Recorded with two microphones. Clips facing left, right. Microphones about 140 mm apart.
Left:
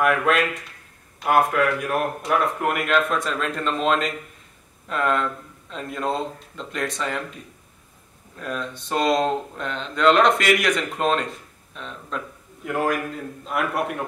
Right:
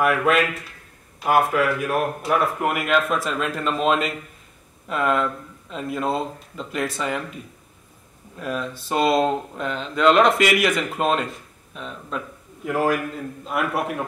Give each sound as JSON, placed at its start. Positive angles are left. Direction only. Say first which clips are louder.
{"t": 0.0, "sound": "speech", "louder": "right 1 dB", "side_deg": 0}
{"t": 8.4, "sound": "speech", "louder": "right 2 dB", "side_deg": -5}